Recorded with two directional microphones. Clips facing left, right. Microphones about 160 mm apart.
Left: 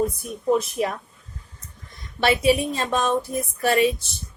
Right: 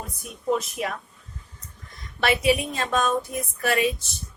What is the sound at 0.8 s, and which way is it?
Female singing, 35° left (ahead or behind).